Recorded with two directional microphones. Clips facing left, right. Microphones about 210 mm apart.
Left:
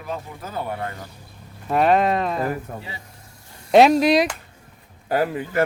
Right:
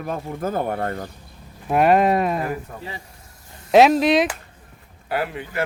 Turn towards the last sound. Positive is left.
turn(degrees=40)  # may be behind; listen again after turning